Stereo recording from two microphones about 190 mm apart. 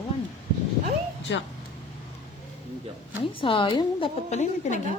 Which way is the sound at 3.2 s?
25° left (ahead or behind).